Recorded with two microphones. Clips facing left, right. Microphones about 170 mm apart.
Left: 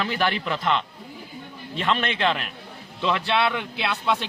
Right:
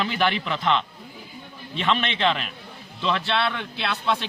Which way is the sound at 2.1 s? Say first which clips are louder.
Right 1 dB; 5° left (ahead or behind).